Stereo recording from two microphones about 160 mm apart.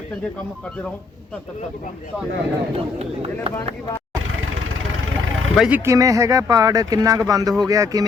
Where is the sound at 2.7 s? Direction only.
40° right (ahead or behind).